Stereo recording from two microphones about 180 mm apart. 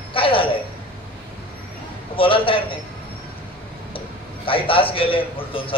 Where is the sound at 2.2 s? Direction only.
30° left (ahead or behind).